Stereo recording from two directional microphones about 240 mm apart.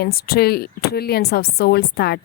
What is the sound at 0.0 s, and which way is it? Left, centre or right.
A woman's voice, left.